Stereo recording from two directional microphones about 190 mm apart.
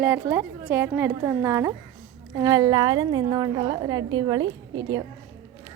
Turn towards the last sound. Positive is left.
turn(degrees=-20)  # may be behind; listen again after turning